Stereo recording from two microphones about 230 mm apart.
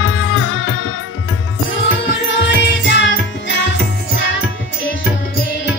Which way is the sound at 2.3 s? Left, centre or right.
Left.